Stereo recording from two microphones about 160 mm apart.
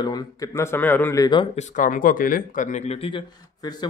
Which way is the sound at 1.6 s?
50° left (ahead or behind).